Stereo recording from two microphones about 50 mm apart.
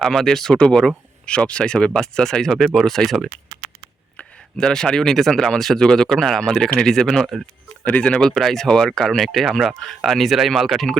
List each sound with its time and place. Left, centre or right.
0.0 s speech: centre
4.5 s speech: centre
7.9 s speech: left
8.4 s speech: centre